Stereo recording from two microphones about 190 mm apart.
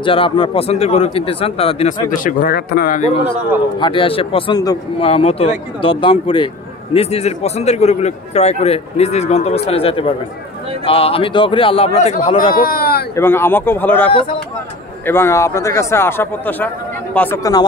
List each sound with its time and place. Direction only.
0.0 s speech: 25° left (ahead or behind)
2.0 s a man's voice: 45° left (ahead or behind)
12.5 s a man's voice: 50° left (ahead or behind)
13.1 s speech: 10° left (ahead or behind)